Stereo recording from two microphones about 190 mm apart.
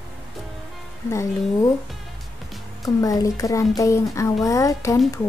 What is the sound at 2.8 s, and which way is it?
Speech, 20° left (ahead or behind).